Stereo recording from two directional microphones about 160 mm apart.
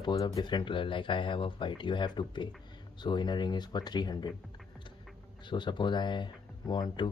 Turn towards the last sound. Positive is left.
turn(degrees=30)  # may be behind; listen again after turning